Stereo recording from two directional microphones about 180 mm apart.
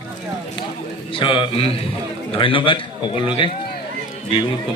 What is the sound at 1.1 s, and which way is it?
A man's voice, 30° left (ahead or behind).